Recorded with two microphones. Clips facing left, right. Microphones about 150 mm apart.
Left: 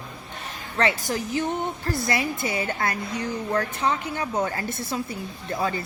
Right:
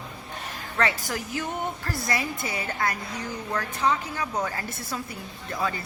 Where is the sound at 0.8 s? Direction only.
25° left (ahead or behind).